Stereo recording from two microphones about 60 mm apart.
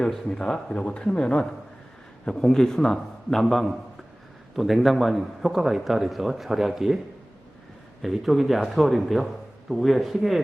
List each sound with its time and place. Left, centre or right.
0.0 s a man's voice: centre
8.0 s a man's voice: centre